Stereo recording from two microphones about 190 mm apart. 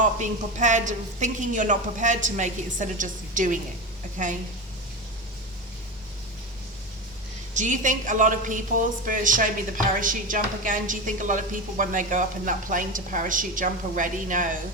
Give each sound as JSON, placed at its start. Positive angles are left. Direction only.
{"t": 0.0, "sound": "a woman's voice", "side_deg": -40}
{"t": 7.5, "sound": "a woman's voice", "side_deg": -40}